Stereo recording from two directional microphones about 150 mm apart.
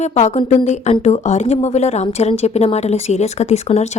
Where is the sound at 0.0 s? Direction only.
50° left (ahead or behind).